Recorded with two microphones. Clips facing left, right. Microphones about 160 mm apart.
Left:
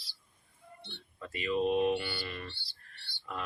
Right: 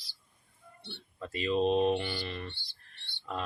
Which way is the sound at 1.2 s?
30° right (ahead or behind).